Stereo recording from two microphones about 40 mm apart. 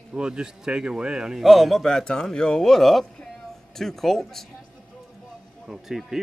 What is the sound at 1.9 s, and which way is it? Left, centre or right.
Speech, centre.